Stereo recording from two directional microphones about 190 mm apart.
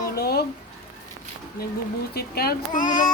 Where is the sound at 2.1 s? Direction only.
55° left (ahead or behind).